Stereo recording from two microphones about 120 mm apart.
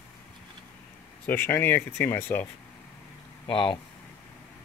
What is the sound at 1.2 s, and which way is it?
Speech, 20° left (ahead or behind).